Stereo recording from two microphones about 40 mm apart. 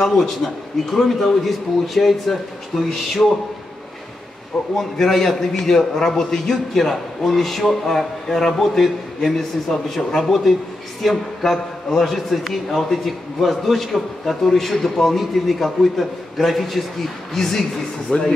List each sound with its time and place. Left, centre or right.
0.0 s a man's voice: centre
4.7 s a man's voice: centre
18.1 s speech: left